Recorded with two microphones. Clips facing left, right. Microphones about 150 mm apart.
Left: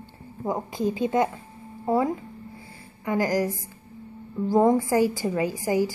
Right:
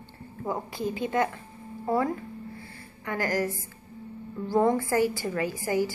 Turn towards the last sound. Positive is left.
turn(degrees=20)  # may be behind; listen again after turning